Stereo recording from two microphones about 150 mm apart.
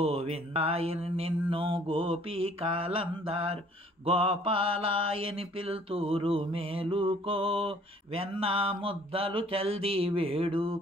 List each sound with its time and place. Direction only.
0.0 s mantra: 40° right (ahead or behind)